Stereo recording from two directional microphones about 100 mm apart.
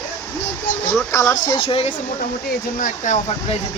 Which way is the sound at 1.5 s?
65° left (ahead or behind).